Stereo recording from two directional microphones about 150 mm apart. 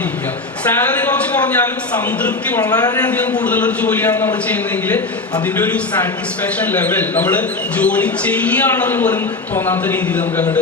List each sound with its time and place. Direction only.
0.7 s a man's voice: 10° left (ahead or behind)
2.6 s speech: 25° left (ahead or behind)
3.1 s a man's voice: 10° left (ahead or behind)
5.5 s a man's voice: 10° left (ahead or behind)